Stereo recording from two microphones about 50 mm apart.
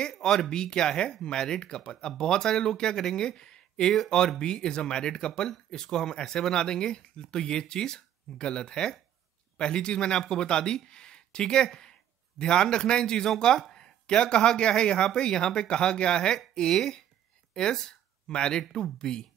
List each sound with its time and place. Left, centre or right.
0.2 s speech: centre